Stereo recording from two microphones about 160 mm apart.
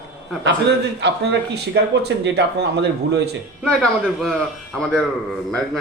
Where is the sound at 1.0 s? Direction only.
90° right.